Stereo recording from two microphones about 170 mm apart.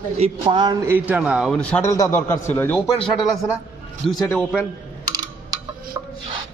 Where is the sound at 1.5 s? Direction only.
10° left (ahead or behind).